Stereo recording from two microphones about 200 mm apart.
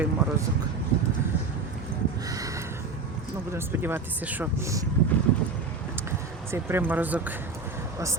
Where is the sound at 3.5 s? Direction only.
10° right (ahead or behind).